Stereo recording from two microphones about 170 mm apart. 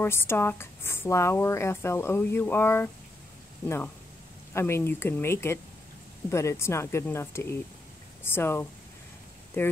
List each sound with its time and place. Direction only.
0.0 s speech: 15° left (ahead or behind)